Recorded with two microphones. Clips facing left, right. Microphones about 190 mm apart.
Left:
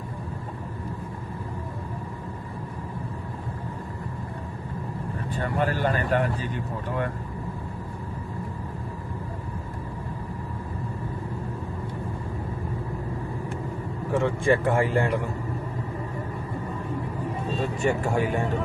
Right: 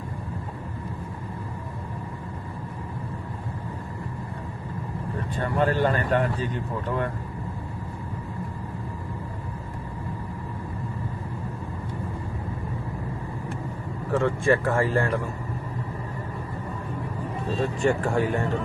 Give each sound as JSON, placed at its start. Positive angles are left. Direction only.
{"t": 5.6, "sound": "a man's voice", "side_deg": 10}
{"t": 14.1, "sound": "a man's voice", "side_deg": 15}
{"t": 17.8, "sound": "a man's voice", "side_deg": 10}